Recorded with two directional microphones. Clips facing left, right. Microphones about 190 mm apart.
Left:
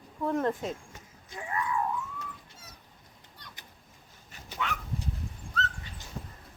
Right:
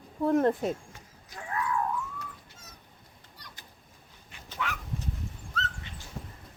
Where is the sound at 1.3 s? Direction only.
5° left (ahead or behind).